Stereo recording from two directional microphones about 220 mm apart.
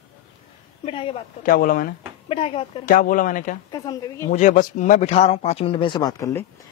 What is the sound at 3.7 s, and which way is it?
Speech, 15° left (ahead or behind).